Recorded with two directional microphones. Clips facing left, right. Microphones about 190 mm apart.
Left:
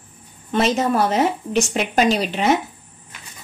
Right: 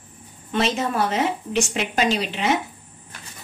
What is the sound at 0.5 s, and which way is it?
A woman's voice, 40° left (ahead or behind).